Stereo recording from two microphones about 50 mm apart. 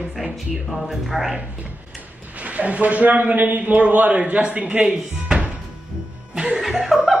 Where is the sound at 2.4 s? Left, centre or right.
Right.